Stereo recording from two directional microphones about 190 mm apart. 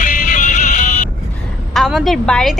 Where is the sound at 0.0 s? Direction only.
45° left (ahead or behind).